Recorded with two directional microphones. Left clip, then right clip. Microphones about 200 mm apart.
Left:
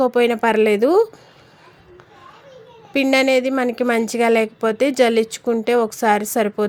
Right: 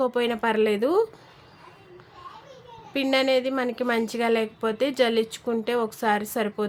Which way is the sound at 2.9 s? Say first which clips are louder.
Left 6 dB; 30° left (ahead or behind).